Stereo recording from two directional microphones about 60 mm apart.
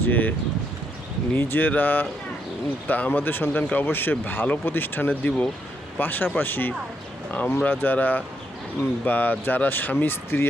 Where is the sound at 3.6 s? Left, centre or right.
Left.